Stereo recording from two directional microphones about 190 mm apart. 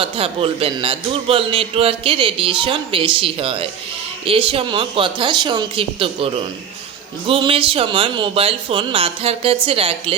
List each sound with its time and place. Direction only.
0.0 s a man's voice: 30° right (ahead or behind)